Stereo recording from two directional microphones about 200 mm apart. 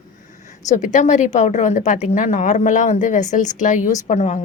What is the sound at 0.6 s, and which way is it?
A woman's voice, 40° left (ahead or behind).